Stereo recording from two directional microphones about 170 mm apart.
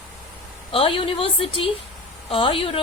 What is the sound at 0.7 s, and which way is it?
Speech, 30° left (ahead or behind).